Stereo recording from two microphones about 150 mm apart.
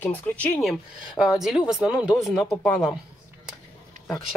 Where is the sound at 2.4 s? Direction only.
10° left (ahead or behind).